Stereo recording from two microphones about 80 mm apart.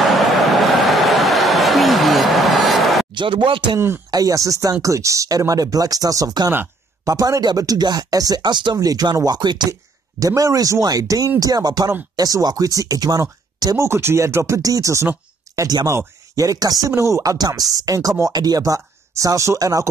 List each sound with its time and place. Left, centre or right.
0.5 s a sound: centre
3.2 s speech: right
4.1 s speech: right
8.7 s speech: right
9.7 s speech: right
13.7 s speech: right
15.5 s a sound: right
16.3 s speech: right